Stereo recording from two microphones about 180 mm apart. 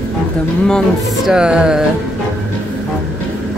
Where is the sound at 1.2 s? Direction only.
5° right (ahead or behind).